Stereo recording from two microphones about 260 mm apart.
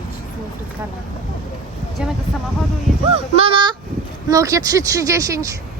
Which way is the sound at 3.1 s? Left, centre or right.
Centre.